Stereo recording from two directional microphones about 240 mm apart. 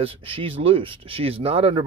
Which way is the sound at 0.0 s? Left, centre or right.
Right.